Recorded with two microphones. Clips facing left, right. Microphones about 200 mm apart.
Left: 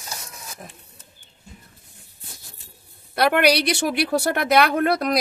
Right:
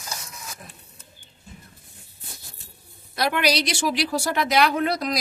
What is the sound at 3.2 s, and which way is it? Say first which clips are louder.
A woman's voice: left 5 dB; 60° left (ahead or behind).